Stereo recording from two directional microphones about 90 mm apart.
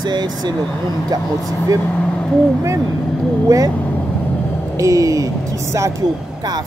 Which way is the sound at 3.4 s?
40° right (ahead or behind).